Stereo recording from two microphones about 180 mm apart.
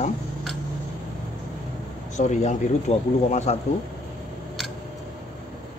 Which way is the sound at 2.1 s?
40° left (ahead or behind).